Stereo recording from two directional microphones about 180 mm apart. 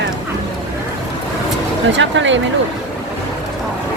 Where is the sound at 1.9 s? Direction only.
90° right.